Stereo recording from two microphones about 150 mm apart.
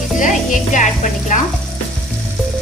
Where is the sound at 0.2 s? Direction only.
55° left (ahead or behind).